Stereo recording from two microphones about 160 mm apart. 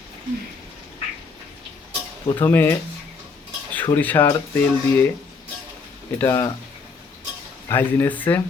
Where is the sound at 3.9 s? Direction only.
10° left (ahead or behind).